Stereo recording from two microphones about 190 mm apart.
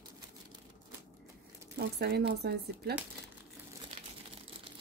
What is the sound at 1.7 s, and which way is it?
Speech, 60° right (ahead or behind).